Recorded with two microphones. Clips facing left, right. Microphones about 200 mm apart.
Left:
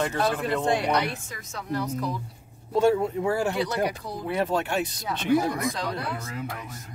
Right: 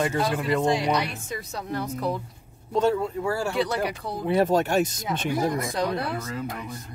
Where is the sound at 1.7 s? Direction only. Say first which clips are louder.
Even; 60° right (ahead or behind).